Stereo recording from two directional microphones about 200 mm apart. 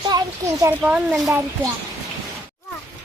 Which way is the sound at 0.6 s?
5° right (ahead or behind).